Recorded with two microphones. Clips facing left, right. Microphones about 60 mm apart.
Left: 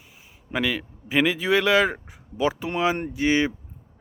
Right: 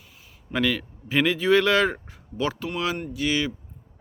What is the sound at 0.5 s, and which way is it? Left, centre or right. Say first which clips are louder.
Speech: right 1 dB; centre.